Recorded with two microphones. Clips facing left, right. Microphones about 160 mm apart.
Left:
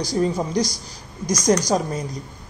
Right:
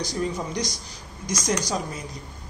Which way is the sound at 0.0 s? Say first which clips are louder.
Left 6 dB; 35° left (ahead or behind).